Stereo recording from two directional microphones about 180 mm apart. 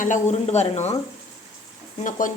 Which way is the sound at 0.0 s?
40° left (ahead or behind).